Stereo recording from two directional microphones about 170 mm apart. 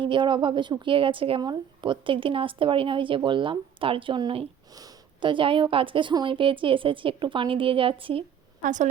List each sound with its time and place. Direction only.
0.0 s a woman's voice: 30° right (ahead or behind)
8.6 s a woman's voice: 45° right (ahead or behind)